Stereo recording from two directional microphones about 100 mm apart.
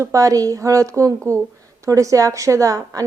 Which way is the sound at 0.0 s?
35° right (ahead or behind).